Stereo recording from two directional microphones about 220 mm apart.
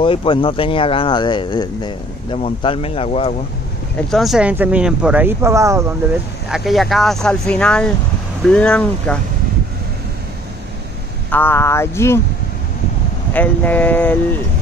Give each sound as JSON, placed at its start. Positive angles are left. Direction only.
{"t": 0.0, "sound": "speech", "side_deg": 25}
{"t": 4.1, "sound": "speech", "side_deg": 0}
{"t": 6.5, "sound": "speech", "side_deg": 0}
{"t": 11.2, "sound": "speech", "side_deg": 10}
{"t": 13.3, "sound": "speech", "side_deg": 5}